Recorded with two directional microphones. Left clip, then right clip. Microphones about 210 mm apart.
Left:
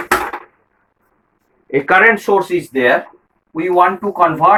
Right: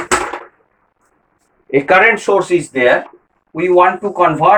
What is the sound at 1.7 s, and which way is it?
Speech, 15° left (ahead or behind).